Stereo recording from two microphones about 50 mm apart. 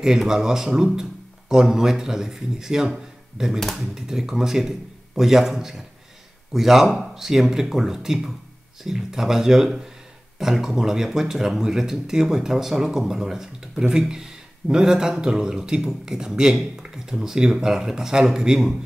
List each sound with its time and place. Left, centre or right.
0.0 s speech: centre